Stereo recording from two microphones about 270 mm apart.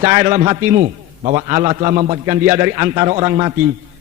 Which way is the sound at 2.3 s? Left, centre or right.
Centre.